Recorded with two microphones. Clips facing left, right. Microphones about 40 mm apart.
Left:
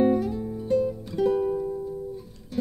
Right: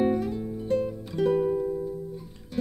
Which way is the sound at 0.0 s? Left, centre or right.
Centre.